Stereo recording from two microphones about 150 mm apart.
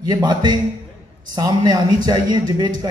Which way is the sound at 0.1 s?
30° right (ahead or behind).